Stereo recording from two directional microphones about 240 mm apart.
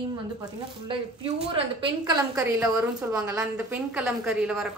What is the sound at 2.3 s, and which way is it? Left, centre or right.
A woman's voice, centre.